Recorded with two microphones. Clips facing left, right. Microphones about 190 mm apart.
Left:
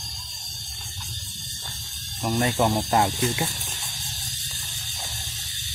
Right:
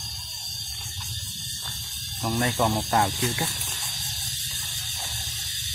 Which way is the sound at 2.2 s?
20° left (ahead or behind).